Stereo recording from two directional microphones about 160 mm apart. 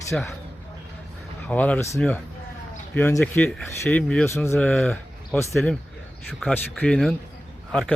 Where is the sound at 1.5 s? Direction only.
10° left (ahead or behind).